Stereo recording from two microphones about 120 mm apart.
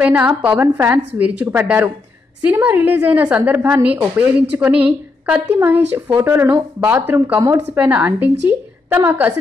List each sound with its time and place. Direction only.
0.0 s a woman's voice: 10° right (ahead or behind)